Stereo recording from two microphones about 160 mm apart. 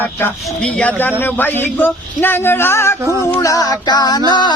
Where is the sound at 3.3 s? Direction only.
20° left (ahead or behind).